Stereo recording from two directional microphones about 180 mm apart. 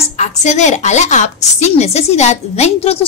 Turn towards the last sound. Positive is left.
turn(degrees=35)  # may be behind; listen again after turning